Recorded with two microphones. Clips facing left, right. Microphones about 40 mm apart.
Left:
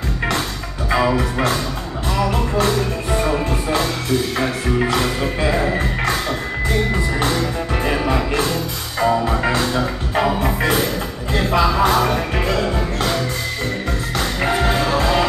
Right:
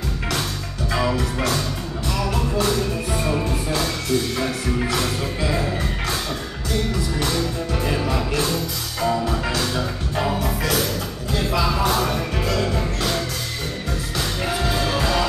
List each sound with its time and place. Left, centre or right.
0.8 s music: left
2.3 s music: left
4.4 s music: left
14.1 s music: left